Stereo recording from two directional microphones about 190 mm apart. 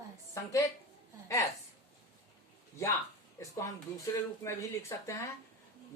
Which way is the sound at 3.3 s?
15° left (ahead or behind).